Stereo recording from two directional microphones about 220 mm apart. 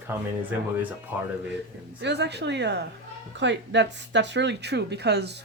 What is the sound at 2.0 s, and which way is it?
A woman's voice, 50° right (ahead or behind).